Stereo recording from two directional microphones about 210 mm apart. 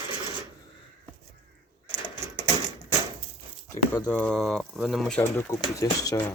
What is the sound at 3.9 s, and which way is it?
Speech, 5° left (ahead or behind).